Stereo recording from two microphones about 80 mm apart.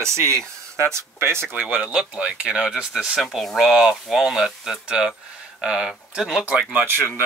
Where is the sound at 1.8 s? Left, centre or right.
Centre.